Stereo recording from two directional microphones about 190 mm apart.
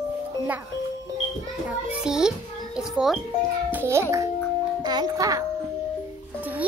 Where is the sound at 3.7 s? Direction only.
10° right (ahead or behind).